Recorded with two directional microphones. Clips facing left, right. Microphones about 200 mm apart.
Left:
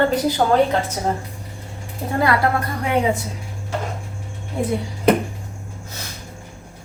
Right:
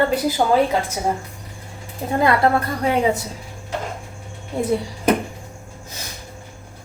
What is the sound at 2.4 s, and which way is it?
Speech, 30° right (ahead or behind).